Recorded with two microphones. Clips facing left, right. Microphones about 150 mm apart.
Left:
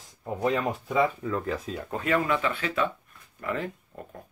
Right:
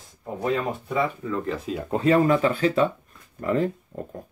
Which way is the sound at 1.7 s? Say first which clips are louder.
Right 8 dB; 20° right (ahead or behind).